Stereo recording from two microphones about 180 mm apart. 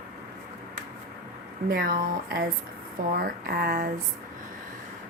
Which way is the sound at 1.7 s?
55° right (ahead or behind).